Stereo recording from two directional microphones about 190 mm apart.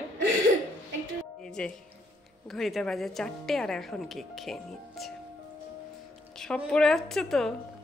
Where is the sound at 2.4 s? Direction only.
Centre (ahead or behind).